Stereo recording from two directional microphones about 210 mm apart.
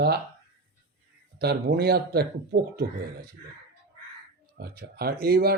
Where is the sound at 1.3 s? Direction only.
50° right (ahead or behind).